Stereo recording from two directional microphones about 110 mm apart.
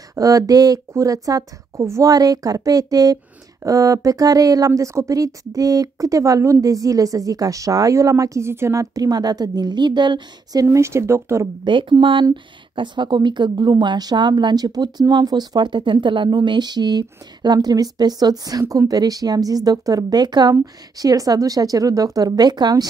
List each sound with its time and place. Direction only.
0.1 s speech: 30° right (ahead or behind)
11.6 s speech: 45° right (ahead or behind)